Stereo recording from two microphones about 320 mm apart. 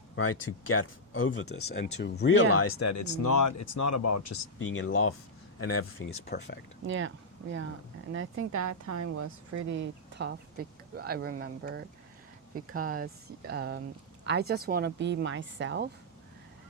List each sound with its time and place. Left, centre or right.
0.2 s speech: left
2.5 s speech: left
4.5 s speech: left
6.2 s speech: left
6.8 s speech: right
8.1 s speech: right
8.5 s speech: right
10.2 s speech: right